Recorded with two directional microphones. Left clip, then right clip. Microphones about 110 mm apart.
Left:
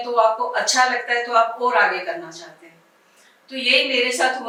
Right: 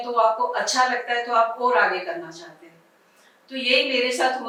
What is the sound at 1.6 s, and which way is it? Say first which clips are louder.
Speech: left 2 dB; 10° right (ahead or behind).